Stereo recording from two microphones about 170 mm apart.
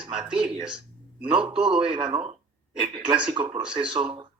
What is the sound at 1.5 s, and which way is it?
Speech, 30° right (ahead or behind).